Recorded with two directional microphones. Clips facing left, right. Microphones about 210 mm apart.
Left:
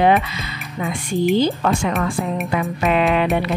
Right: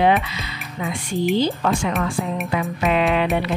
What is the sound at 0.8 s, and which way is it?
Speech, 50° left (ahead or behind).